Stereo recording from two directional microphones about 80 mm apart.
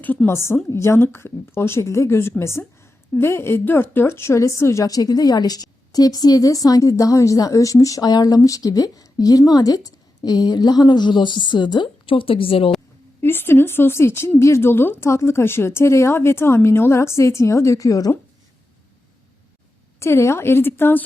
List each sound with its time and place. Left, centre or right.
0.3 s a woman's voice: left
13.2 s speech: left
20.0 s speech: left